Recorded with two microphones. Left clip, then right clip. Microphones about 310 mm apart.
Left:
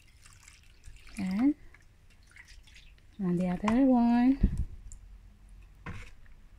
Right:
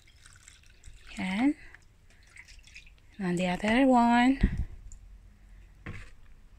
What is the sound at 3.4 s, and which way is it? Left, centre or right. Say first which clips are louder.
Speech: right 3 dB; right.